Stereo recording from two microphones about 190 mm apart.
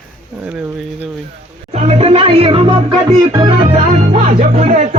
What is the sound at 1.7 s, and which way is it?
Music, 35° right (ahead or behind).